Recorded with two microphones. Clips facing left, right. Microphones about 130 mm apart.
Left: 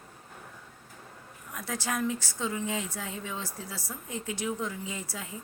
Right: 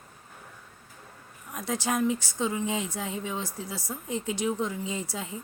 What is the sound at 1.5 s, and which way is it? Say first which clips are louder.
Speech: right 4 dB; 20° right (ahead or behind).